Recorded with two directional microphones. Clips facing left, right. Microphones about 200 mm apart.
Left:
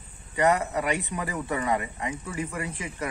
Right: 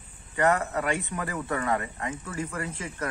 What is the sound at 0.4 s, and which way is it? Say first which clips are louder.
Speech: left 1 dB; 20° left (ahead or behind).